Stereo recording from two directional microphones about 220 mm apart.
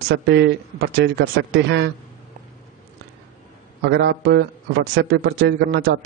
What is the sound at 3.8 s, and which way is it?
A man's voice, 50° right (ahead or behind).